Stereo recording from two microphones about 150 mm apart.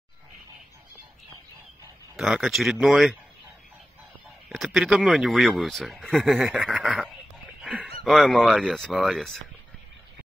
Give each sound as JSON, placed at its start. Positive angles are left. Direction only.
{"t": 2.1, "sound": "speech", "side_deg": -5}
{"t": 4.5, "sound": "speech", "side_deg": -5}